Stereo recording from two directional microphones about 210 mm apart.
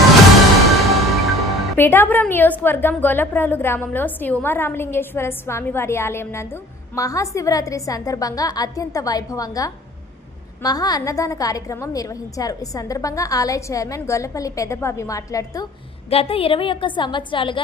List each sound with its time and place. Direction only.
0.7 s music: centre (ahead or behind)
1.7 s a woman's voice: 10° left (ahead or behind)
16.0 s a woman's voice: 25° left (ahead or behind)